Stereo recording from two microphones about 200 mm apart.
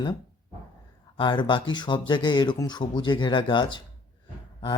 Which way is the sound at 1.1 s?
25° left (ahead or behind).